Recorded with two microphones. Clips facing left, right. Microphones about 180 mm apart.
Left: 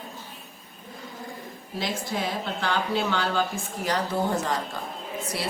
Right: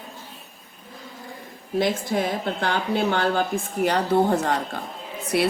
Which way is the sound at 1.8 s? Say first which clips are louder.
Right 7 dB; 55° right (ahead or behind).